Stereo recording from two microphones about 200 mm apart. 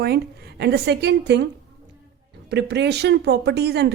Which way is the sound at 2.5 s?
60° right (ahead or behind).